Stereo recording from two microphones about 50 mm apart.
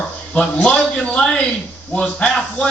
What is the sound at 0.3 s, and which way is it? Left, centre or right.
A man's voice, left.